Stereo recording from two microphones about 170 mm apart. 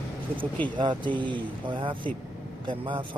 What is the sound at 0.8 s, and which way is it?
A man's voice, 30° right (ahead or behind).